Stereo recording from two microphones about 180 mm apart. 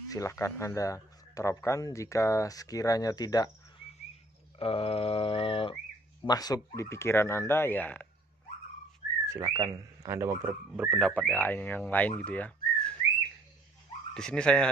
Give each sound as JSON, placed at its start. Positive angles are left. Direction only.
{"t": 0.1, "sound": "speech", "side_deg": 15}
{"t": 4.6, "sound": "a sound", "side_deg": 30}
{"t": 6.2, "sound": "speech", "side_deg": 20}
{"t": 9.3, "sound": "speech", "side_deg": -20}
{"t": 10.9, "sound": "speech", "side_deg": 5}
{"t": 12.3, "sound": "whistling", "side_deg": 10}
{"t": 14.1, "sound": "speech", "side_deg": 5}